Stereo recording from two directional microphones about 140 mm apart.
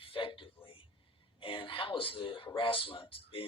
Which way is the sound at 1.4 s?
35° left (ahead or behind).